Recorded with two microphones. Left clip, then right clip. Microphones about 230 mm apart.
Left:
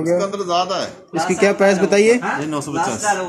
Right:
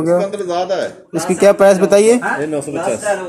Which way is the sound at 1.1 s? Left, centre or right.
Centre.